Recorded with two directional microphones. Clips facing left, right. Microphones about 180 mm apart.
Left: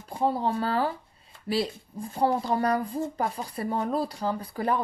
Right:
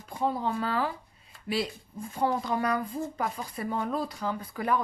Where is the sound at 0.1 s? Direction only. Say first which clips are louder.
Left 3 dB; 30° left (ahead or behind).